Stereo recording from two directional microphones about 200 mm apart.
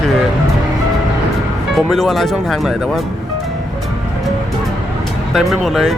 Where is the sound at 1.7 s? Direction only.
Centre (ahead or behind).